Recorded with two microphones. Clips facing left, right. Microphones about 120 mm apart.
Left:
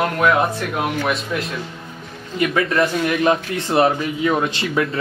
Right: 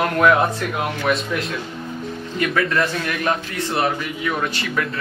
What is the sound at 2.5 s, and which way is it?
A man's voice, 20° left (ahead or behind).